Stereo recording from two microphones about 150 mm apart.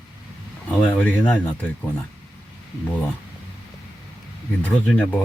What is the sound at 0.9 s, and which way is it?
Speech, 10° left (ahead or behind).